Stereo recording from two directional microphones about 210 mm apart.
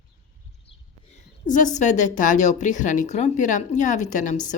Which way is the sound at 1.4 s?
35° left (ahead or behind).